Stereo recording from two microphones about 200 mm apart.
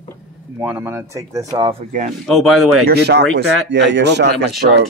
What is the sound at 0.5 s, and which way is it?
Speech, 10° right (ahead or behind).